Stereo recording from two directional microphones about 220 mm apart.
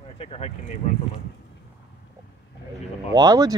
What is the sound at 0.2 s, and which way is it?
Speech, 25° left (ahead or behind).